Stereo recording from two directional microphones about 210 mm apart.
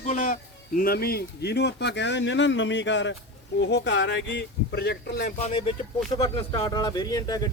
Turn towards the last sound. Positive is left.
turn(degrees=20)  # may be behind; listen again after turning